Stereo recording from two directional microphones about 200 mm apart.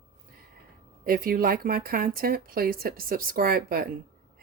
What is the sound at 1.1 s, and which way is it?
Speech, 45° right (ahead or behind).